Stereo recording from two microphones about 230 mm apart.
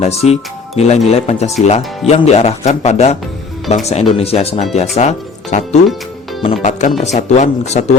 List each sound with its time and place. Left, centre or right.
0.0 s speech: left